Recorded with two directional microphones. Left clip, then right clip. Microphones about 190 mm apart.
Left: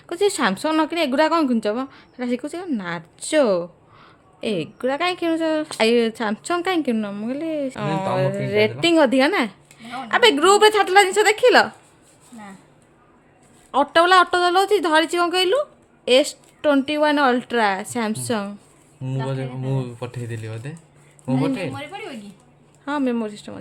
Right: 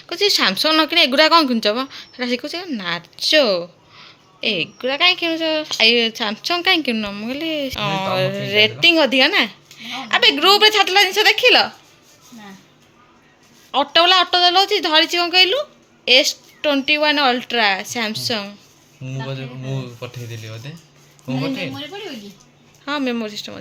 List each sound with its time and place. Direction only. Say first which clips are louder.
0.1 s speech: right 3 dB; 20° left (ahead or behind)
13.7 s speech: right 2 dB; 25° left (ahead or behind)
19.0 s speech: left 2 dB; 70° left (ahead or behind)
22.9 s speech: right 1 dB; 15° left (ahead or behind)